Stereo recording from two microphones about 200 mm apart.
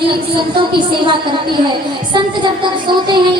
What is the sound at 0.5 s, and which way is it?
A woman's voice, 25° right (ahead or behind).